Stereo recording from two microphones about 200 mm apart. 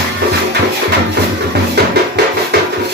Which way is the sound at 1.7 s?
55° right (ahead or behind).